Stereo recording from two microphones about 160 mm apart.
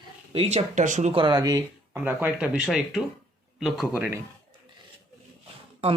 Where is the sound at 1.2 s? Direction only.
25° right (ahead or behind).